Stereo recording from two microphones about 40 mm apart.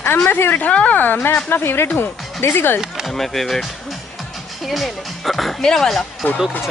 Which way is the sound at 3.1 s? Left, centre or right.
Centre.